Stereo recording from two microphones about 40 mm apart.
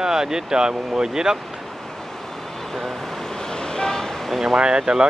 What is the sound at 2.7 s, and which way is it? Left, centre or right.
Vehicle, centre.